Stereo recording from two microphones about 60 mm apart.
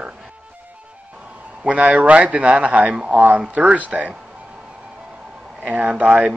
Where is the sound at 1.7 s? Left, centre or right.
Right.